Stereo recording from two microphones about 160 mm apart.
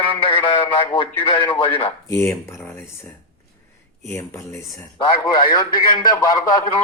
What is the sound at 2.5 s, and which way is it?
Speech, 15° left (ahead or behind).